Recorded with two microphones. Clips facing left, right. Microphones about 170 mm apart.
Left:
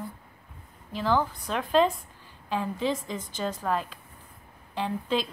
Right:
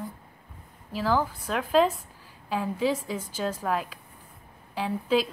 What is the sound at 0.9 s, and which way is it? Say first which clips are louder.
A woman's voice: even; 5° right (ahead or behind).